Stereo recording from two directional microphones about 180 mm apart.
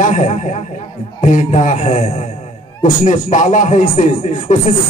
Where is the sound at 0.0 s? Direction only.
40° left (ahead or behind).